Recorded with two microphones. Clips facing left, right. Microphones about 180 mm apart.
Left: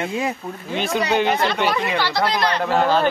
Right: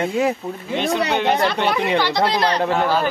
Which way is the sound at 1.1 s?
Centre (ahead or behind).